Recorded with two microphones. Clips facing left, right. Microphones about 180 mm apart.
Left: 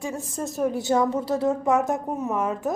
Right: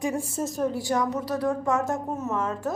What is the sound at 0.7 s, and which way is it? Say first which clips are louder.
A woman's voice: left 7 dB; 20° left (ahead or behind).